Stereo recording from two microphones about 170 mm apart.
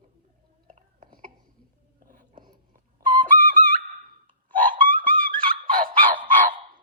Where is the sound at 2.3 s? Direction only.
25° right (ahead or behind).